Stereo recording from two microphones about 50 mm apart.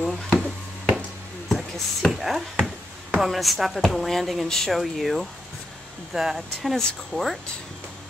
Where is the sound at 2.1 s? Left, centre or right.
Centre.